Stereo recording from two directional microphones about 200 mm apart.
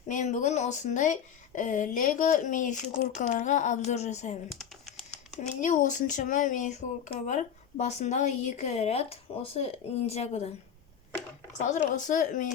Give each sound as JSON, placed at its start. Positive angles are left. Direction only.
{"t": 0.1, "sound": "speech", "side_deg": 40}
{"t": 4.5, "sound": "typing", "side_deg": 0}
{"t": 5.5, "sound": "speech", "side_deg": 40}
{"t": 11.5, "sound": "speech", "side_deg": 40}